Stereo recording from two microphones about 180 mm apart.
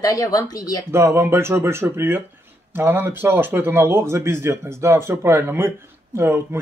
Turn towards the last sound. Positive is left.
turn(degrees=-15)  # may be behind; listen again after turning